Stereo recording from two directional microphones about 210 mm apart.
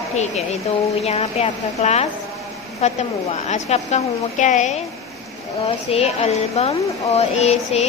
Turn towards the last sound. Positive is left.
turn(degrees=30)  # may be behind; listen again after turning